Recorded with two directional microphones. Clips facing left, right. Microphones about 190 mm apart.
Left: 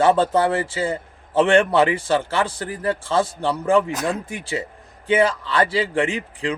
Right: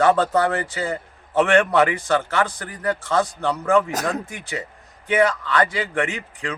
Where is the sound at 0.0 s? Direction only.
30° left (ahead or behind).